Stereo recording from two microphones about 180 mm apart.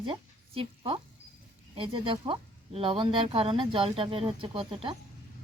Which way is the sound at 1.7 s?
30° right (ahead or behind).